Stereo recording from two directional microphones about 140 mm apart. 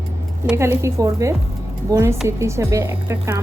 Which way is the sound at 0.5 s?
20° right (ahead or behind).